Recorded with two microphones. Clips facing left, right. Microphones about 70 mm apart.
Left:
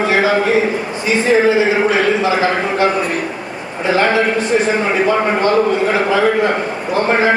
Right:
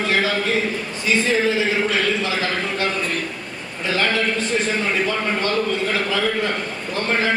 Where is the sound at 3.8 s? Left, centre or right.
Left.